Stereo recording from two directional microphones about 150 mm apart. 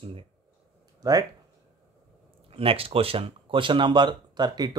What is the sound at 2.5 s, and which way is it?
Speech, 40° right (ahead or behind).